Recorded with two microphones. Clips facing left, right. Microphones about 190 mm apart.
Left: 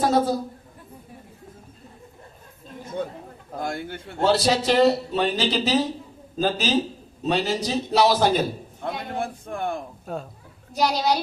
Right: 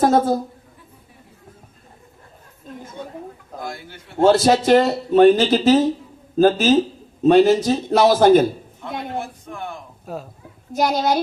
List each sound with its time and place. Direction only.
0.0 s a woman's voice: 50° right (ahead or behind)
3.7 s a man's voice: 55° left (ahead or behind)
4.2 s speech: 50° right (ahead or behind)
9.1 s a man's voice: 50° left (ahead or behind)
10.1 s speech: centre (ahead or behind)
10.7 s speech: 50° right (ahead or behind)